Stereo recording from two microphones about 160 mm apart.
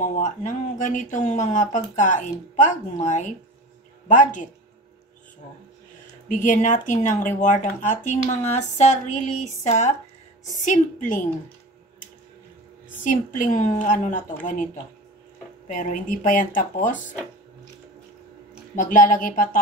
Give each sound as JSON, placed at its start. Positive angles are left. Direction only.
{"t": 0.0, "sound": "speech", "side_deg": 50}
{"t": 6.2, "sound": "speech", "side_deg": 55}
{"t": 13.0, "sound": "speech", "side_deg": 55}
{"t": 15.7, "sound": "speech", "side_deg": 55}
{"t": 18.8, "sound": "speech", "side_deg": 55}